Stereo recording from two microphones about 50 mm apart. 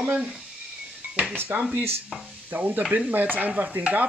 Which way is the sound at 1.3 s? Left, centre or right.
Right.